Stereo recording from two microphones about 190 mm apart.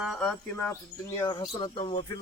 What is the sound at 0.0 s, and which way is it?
Speech, centre (ahead or behind).